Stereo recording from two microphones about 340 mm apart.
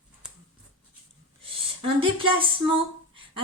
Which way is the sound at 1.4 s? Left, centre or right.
Centre.